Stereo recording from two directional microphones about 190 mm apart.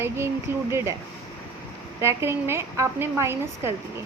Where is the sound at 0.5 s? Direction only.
15° right (ahead or behind).